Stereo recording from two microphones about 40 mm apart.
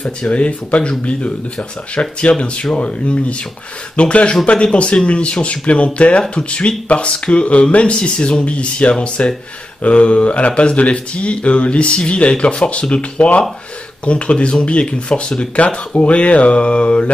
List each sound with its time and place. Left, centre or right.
0.3 s speech: left
2.0 s speech: left
2.8 s speech: left